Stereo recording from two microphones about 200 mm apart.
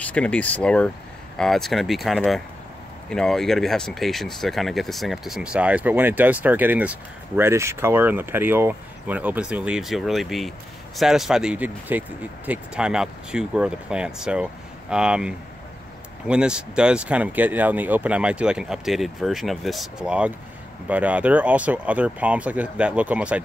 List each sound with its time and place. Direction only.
0.0 s speech: 5° left (ahead or behind)